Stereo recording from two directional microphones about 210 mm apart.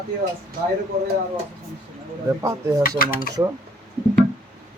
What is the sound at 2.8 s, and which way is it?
Speech, 45° left (ahead or behind).